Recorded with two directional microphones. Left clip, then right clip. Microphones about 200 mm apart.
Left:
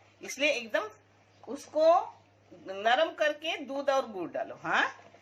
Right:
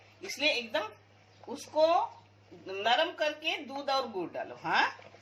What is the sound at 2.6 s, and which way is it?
Speech, 25° left (ahead or behind).